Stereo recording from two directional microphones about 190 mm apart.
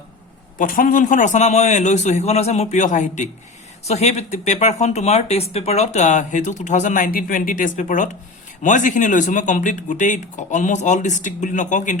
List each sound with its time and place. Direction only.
0.6 s speech: 45° left (ahead or behind)